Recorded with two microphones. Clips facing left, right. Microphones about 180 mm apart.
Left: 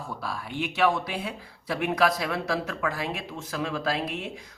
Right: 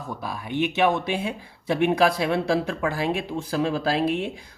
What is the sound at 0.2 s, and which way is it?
A man's voice, 20° right (ahead or behind).